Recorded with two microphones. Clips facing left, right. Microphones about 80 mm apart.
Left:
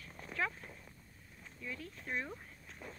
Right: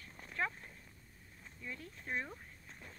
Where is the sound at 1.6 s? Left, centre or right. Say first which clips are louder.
Left 2 dB; left.